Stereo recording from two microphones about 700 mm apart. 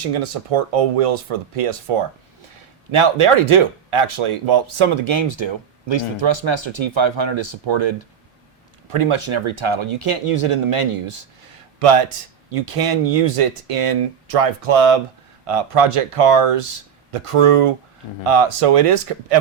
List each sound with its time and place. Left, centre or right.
0.1 s speech: right